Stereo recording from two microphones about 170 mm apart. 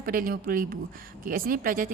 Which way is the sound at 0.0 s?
55° right (ahead or behind).